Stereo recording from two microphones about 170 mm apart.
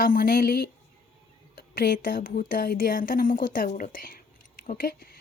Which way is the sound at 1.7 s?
60° left (ahead or behind).